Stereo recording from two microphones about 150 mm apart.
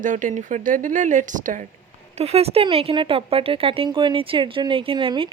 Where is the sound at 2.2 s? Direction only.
45° right (ahead or behind).